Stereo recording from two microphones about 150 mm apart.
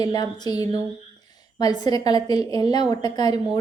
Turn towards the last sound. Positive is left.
turn(degrees=25)  # may be behind; listen again after turning